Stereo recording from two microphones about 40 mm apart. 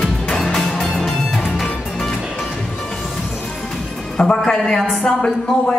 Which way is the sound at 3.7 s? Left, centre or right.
Centre.